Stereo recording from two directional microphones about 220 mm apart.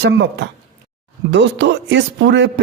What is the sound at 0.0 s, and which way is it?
A man's voice, 55° right (ahead or behind).